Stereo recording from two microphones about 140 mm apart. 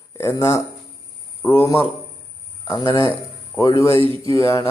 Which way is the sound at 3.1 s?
25° left (ahead or behind).